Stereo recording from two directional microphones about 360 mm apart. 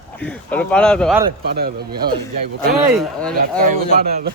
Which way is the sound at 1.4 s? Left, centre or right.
Right.